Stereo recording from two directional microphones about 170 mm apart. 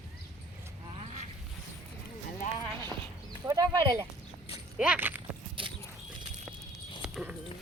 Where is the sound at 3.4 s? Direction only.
20° right (ahead or behind).